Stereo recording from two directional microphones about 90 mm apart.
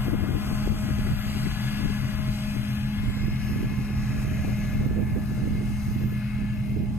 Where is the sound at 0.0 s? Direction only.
25° right (ahead or behind).